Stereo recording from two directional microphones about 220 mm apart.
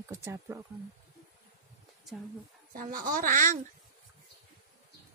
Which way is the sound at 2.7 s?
40° right (ahead or behind).